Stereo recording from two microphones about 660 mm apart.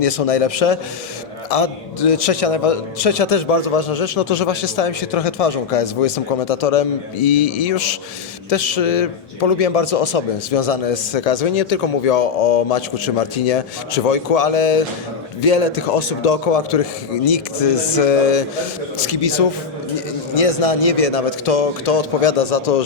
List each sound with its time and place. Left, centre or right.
0.0 s a man's voice: left
18.9 s speech: left
20.3 s a man's voice: left